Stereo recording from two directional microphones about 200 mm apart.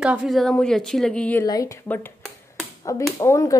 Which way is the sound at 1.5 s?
15° left (ahead or behind).